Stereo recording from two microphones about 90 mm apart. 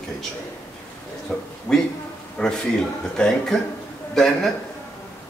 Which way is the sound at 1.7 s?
15° left (ahead or behind).